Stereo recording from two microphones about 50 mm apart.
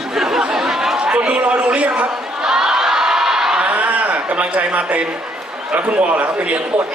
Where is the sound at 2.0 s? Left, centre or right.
Centre.